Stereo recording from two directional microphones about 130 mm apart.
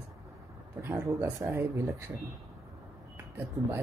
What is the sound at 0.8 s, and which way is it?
Speech, 20° right (ahead or behind).